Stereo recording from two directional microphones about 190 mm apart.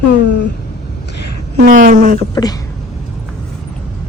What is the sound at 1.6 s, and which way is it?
Speech, 45° right (ahead or behind).